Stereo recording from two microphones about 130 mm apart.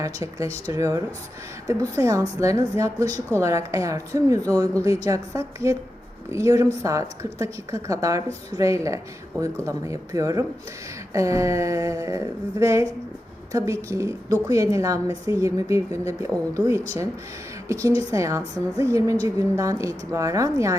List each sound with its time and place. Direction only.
0.0 s a woman's voice: 25° right (ahead or behind)